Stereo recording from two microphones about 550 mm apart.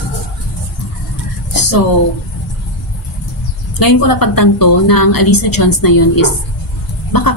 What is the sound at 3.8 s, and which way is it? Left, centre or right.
A woman's voice, left.